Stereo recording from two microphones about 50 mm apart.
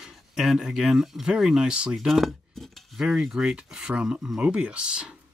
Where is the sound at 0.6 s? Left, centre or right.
Centre.